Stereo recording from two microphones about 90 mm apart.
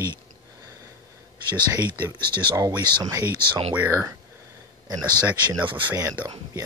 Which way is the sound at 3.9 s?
30° right (ahead or behind).